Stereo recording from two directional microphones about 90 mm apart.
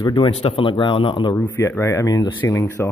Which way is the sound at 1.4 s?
25° left (ahead or behind).